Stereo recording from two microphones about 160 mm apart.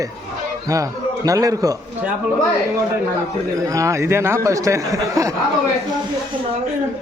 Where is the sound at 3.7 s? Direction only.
20° right (ahead or behind).